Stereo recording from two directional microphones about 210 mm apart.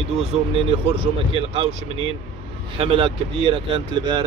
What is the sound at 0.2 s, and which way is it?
Speech, 25° right (ahead or behind).